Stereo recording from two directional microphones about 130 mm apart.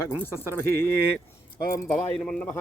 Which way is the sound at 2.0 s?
5° left (ahead or behind).